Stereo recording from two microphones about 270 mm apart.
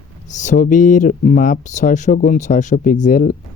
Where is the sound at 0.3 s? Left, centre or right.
Left.